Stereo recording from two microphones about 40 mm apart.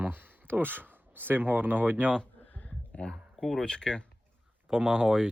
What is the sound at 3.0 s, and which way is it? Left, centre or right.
Speech, left.